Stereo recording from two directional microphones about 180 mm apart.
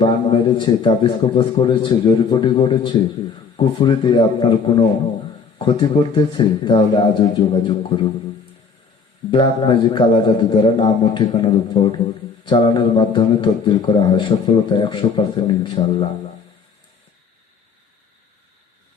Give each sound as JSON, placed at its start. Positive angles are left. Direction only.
{"t": 0.0, "sound": "a man's voice", "side_deg": 25}
{"t": 9.3, "sound": "a man's voice", "side_deg": 25}